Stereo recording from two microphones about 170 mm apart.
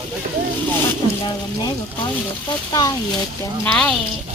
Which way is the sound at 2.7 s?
20° left (ahead or behind).